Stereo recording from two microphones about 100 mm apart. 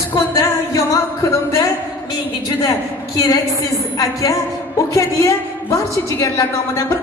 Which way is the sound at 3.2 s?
35° left (ahead or behind).